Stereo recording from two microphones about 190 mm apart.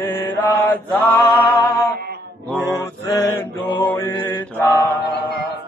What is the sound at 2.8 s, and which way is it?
Mantra, 15° left (ahead or behind).